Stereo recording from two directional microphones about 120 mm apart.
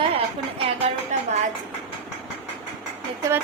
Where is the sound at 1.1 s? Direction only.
75° right (ahead or behind).